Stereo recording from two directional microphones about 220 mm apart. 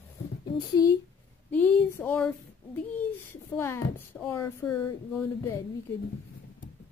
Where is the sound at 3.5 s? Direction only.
10° left (ahead or behind).